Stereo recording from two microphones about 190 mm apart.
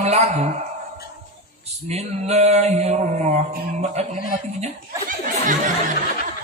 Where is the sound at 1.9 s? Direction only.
35° right (ahead or behind).